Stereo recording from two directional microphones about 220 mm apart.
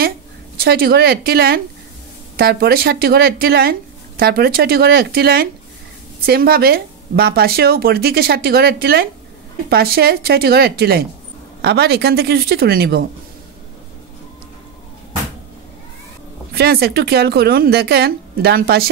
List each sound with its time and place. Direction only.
0.6 s speech: 45° right (ahead or behind)
16.5 s speech: 45° right (ahead or behind)